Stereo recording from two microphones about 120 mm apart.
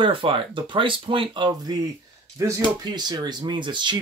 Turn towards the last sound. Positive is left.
turn(degrees=-40)  # may be behind; listen again after turning